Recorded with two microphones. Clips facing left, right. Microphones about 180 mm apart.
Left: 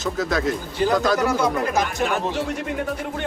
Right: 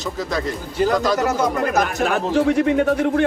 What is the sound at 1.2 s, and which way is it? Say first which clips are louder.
Speech: right 2 dB; 45° right (ahead or behind).